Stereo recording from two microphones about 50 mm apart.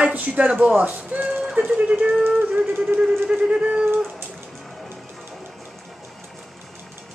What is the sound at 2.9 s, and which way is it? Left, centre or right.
Speech, right.